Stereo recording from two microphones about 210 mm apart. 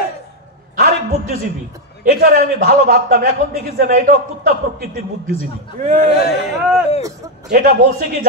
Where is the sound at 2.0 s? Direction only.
45° right (ahead or behind).